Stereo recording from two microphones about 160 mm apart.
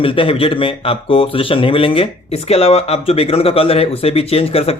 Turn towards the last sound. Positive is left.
turn(degrees=40)  # may be behind; listen again after turning